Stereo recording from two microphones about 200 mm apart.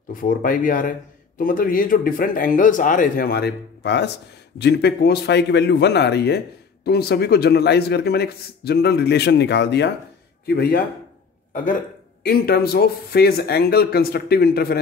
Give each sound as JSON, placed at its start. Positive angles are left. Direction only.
{"t": 0.1, "sound": "speech", "side_deg": 45}
{"t": 11.5, "sound": "a man's voice", "side_deg": 40}